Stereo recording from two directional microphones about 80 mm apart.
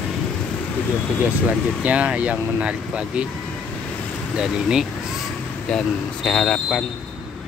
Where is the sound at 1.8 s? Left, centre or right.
Centre.